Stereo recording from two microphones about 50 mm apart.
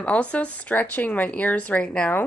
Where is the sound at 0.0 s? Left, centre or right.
Left.